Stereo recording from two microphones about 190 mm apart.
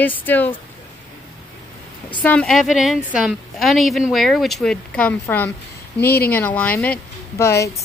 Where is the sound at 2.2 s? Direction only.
5° left (ahead or behind).